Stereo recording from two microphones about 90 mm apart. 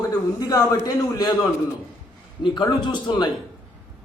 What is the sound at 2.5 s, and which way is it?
Speech, 60° left (ahead or behind).